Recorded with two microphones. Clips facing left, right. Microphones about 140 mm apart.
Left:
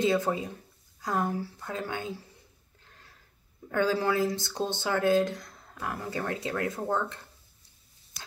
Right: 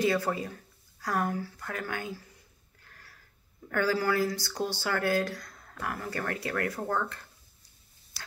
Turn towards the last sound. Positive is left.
turn(degrees=20)  # may be behind; listen again after turning